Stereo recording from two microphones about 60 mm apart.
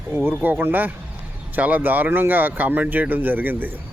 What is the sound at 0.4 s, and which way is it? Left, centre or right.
Speech, right.